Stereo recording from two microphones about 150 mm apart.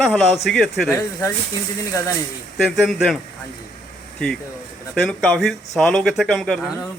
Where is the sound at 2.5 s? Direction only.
Centre (ahead or behind).